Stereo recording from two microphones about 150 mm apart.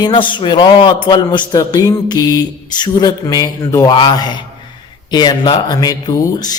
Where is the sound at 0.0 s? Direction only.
30° left (ahead or behind).